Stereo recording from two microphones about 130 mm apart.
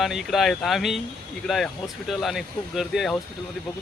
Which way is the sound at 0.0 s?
Centre (ahead or behind).